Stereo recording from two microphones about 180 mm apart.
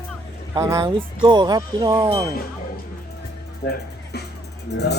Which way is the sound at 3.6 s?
65° left (ahead or behind).